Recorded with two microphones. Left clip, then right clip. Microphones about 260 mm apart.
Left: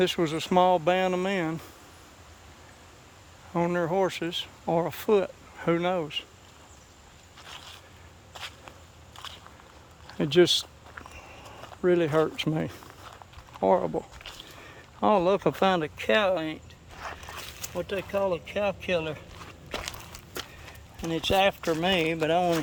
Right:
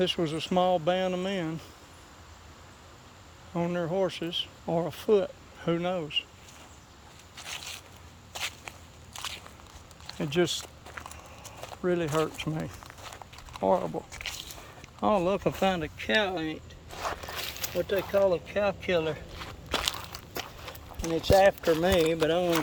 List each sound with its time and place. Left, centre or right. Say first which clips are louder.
0.0 s speech: left 2 dB; centre
3.5 s speech: left 4 dB; centre
7.3 s boat: right 5 dB; right
8.3 s a sound: right 5 dB; right
10.2 s speech: left 7 dB; left
11.4 s a sound: right 5 dB; right
11.8 s speech: left 5 dB; centre
14.1 s squish: right 5 dB; right
15.0 s speech: left 3 dB; centre
16.9 s a sound: right 5 dB; right
17.7 s speech: right 3 dB; centre
19.7 s walk: right 6 dB; right
21.1 s speech: right 2 dB; centre